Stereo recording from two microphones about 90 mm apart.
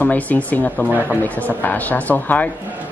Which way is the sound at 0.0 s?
20° left (ahead or behind).